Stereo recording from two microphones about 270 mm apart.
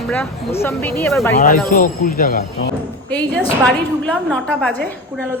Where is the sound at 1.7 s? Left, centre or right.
Left.